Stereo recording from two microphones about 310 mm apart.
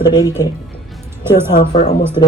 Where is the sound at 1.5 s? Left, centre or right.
Left.